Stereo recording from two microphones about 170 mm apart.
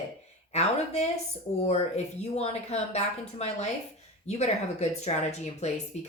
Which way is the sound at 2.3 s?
40° left (ahead or behind).